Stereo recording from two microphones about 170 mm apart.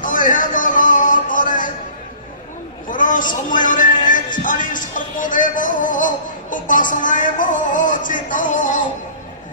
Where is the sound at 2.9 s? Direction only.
50° left (ahead or behind).